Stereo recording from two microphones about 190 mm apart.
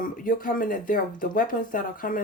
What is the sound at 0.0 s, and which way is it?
Speech, 45° left (ahead or behind).